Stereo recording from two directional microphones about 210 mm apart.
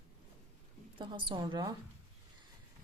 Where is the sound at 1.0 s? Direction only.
25° right (ahead or behind).